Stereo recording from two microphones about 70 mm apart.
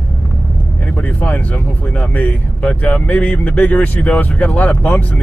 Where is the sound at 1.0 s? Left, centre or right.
Left.